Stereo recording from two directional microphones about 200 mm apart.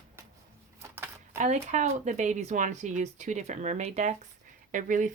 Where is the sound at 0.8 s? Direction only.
15° right (ahead or behind).